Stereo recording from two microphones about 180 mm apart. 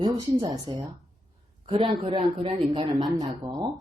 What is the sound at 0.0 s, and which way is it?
Speech, 20° right (ahead or behind).